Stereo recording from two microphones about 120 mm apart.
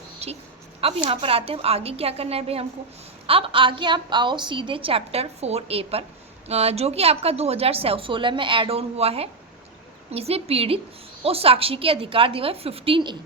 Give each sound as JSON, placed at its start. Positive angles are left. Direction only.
{"t": 0.2, "sound": "a woman's voice", "side_deg": -60}
{"t": 0.8, "sound": "a woman's voice", "side_deg": -50}